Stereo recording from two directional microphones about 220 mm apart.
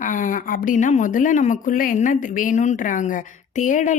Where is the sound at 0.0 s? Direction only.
35° left (ahead or behind).